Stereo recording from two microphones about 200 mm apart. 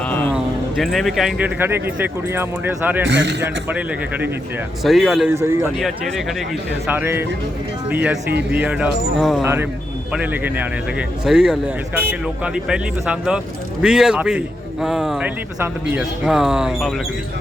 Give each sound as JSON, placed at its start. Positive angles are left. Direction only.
{"t": 0.1, "sound": "a sound", "side_deg": 10}
{"t": 0.3, "sound": "speech", "side_deg": 0}
{"t": 3.1, "sound": "a man's voice", "side_deg": -65}
{"t": 3.4, "sound": "a man's voice", "side_deg": -10}
{"t": 5.3, "sound": "speech", "side_deg": -15}
{"t": 6.8, "sound": "a man's voice", "side_deg": -10}